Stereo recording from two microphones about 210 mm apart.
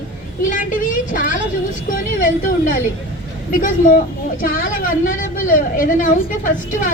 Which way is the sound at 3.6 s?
40° left (ahead or behind).